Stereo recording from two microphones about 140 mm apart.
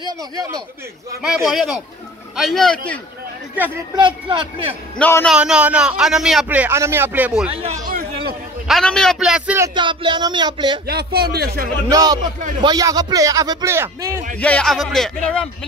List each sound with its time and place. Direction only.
0.0 s speech: 25° right (ahead or behind)
1.2 s speech: 5° right (ahead or behind)
3.5 s a man's voice: 10° right (ahead or behind)
4.9 s a man's voice: 10° left (ahead or behind)
5.3 s a man's voice: 5° right (ahead or behind)
7.8 s a sound: 90° right
8.6 s speech: centre (ahead or behind)
9.8 s speech: 35° right (ahead or behind)
10.9 s a man's voice: 90° right
11.9 s speech: 30° right (ahead or behind)
14.4 s speech: 5° left (ahead or behind)